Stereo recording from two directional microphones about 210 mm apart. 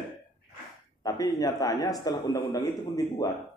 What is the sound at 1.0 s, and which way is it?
Speech, 15° left (ahead or behind).